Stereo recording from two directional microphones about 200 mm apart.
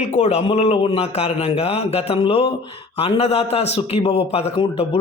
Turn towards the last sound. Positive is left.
turn(degrees=30)  # may be behind; listen again after turning